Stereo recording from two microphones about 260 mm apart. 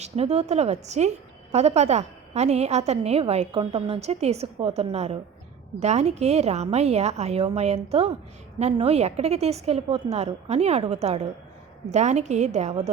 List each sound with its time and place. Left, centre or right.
0.0 s a woman's voice: right